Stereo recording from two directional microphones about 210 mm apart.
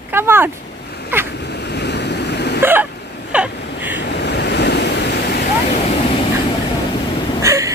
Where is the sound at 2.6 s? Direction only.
10° right (ahead or behind).